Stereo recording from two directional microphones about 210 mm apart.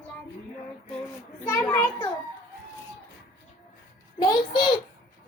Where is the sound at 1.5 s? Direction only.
15° left (ahead or behind).